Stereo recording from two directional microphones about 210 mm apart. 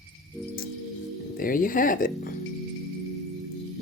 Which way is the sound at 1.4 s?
40° left (ahead or behind).